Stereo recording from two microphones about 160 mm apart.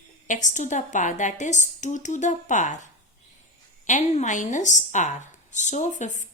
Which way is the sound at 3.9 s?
50° left (ahead or behind).